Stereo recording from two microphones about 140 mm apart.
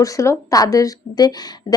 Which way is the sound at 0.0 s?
25° left (ahead or behind).